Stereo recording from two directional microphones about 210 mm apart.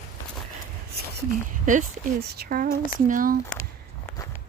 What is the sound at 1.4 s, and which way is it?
Speech, 40° right (ahead or behind).